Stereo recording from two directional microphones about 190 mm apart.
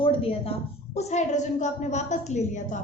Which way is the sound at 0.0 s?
30° left (ahead or behind).